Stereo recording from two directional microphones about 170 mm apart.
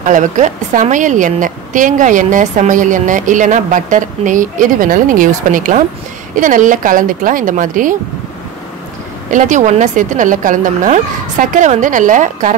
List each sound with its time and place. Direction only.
0.0 s a woman's voice: 45° right (ahead or behind)
9.3 s a woman's voice: 45° right (ahead or behind)